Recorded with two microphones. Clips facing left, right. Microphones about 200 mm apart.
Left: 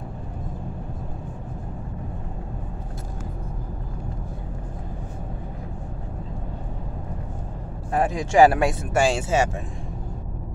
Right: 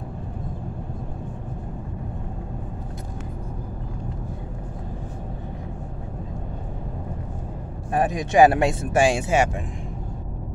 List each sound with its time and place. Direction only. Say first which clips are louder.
7.9 s speech: even; 20° right (ahead or behind)